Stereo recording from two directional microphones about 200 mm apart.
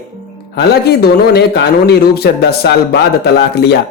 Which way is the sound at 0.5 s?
55° left (ahead or behind).